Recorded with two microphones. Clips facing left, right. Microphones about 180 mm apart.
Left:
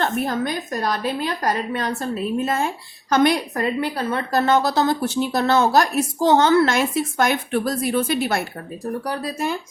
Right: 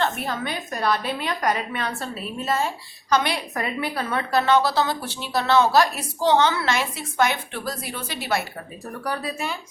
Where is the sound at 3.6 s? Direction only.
35° left (ahead or behind).